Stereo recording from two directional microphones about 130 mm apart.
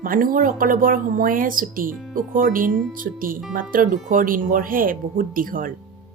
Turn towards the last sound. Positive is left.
turn(degrees=-90)